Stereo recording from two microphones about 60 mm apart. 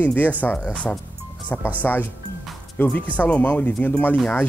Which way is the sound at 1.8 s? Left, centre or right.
Left.